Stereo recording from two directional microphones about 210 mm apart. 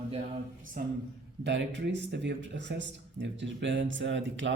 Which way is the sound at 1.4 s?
55° right (ahead or behind).